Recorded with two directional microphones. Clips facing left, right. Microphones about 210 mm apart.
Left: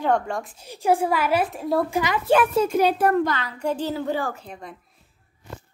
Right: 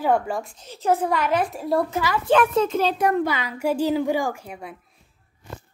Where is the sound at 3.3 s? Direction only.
10° right (ahead or behind).